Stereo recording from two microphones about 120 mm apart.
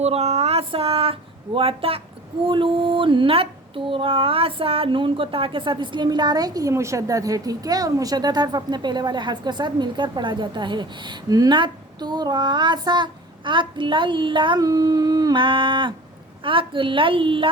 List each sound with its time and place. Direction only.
0.0 s a woman's voice: 60° right (ahead or behind); by 14.6 s 40° right (ahead or behind)
14.6 s a woman's voice: 30° right (ahead or behind); by 17.5 s 45° right (ahead or behind)